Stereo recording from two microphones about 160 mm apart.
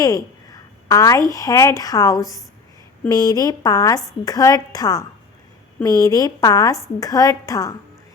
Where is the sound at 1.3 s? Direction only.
20° left (ahead or behind).